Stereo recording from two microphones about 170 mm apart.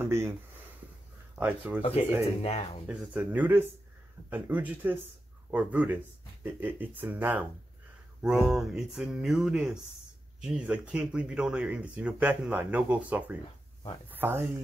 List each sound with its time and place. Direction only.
0.0 s speech: 15° right (ahead or behind)
1.4 s speech: 10° right (ahead or behind)
1.8 s speech: 35° left (ahead or behind)
2.9 s speech: 10° right (ahead or behind)